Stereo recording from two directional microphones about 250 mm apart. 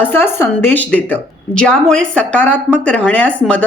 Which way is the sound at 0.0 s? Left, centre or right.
Centre.